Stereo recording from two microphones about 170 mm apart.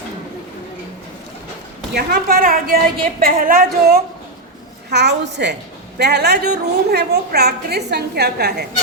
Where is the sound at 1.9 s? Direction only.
60° right (ahead or behind).